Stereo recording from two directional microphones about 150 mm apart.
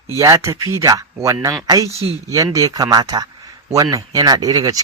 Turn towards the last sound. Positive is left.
turn(degrees=-25)  # may be behind; listen again after turning